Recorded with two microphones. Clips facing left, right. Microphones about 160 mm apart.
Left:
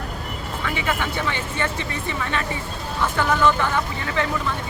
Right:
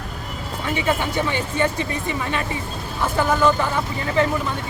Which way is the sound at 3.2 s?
10° right (ahead or behind).